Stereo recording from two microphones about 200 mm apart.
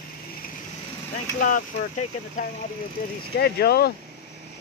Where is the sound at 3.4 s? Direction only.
55° left (ahead or behind).